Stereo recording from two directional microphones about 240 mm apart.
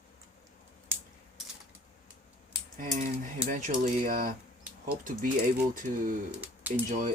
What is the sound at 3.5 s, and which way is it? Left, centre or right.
Speech, right.